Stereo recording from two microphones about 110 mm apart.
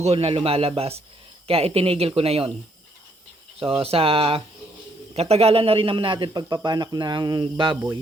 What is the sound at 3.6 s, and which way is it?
Speech, 55° right (ahead or behind).